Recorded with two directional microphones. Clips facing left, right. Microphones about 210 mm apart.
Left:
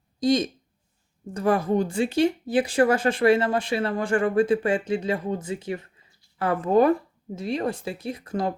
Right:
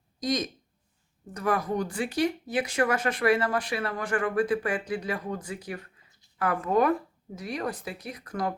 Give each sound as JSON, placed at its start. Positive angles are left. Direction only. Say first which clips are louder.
{"t": 0.2, "sound": "speech", "louder": "left 7 dB", "side_deg": 30}